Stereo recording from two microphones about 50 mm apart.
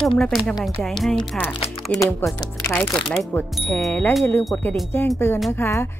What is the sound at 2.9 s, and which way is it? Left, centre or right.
Speech, centre.